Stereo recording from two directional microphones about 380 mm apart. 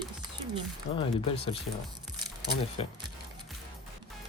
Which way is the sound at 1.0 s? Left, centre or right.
Centre.